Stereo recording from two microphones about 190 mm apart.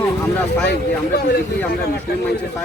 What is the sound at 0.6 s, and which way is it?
Speech, 65° left (ahead or behind).